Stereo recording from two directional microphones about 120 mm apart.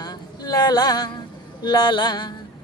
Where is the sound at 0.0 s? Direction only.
35° left (ahead or behind).